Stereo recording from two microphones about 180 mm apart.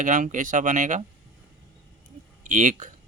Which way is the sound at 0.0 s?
45° right (ahead or behind).